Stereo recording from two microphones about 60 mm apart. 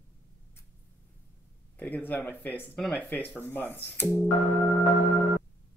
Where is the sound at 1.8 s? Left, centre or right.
Left.